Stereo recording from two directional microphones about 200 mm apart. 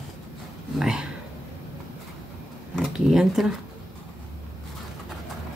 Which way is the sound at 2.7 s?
Centre (ahead or behind).